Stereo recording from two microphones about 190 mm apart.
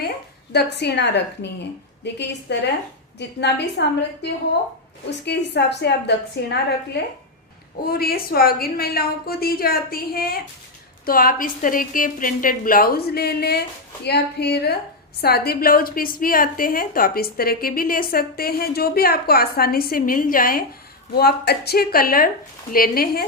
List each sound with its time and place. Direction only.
0.5 s a woman's voice: 60° left (ahead or behind)